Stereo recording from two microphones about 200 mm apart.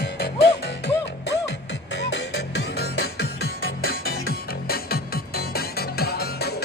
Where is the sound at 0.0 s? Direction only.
60° left (ahead or behind).